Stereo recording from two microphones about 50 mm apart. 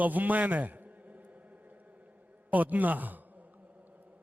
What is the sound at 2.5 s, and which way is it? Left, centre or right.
Speech, right.